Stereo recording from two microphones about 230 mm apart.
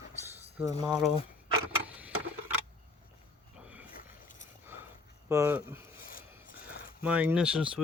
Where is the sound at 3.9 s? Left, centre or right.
Left.